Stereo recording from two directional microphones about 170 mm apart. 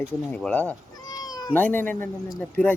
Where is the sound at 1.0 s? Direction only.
25° left (ahead or behind).